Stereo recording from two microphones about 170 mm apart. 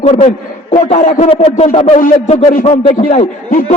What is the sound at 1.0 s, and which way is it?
Speech, 55° left (ahead or behind).